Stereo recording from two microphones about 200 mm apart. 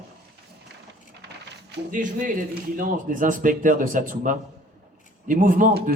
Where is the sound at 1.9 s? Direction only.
40° right (ahead or behind).